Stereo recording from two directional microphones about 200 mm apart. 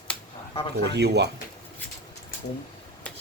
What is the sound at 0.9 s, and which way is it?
Speech, 55° right (ahead or behind).